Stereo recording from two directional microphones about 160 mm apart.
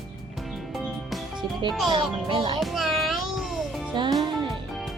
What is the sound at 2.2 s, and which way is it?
Speech, 30° right (ahead or behind).